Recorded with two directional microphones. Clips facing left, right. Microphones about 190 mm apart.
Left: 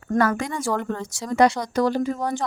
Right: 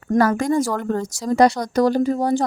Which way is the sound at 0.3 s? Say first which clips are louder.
Right 6 dB; 45° right (ahead or behind).